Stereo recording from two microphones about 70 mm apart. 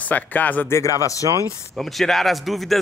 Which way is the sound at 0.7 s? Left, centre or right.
Left.